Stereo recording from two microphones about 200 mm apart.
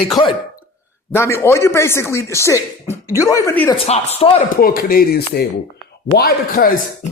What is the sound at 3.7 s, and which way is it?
A man's voice, 30° left (ahead or behind).